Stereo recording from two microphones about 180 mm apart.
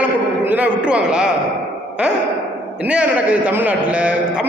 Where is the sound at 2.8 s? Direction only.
5° right (ahead or behind).